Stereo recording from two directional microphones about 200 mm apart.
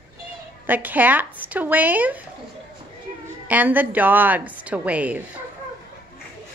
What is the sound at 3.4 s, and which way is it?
Speech, 10° right (ahead or behind).